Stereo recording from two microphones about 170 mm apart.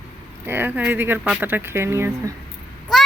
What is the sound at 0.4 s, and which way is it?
Speech, 10° right (ahead or behind).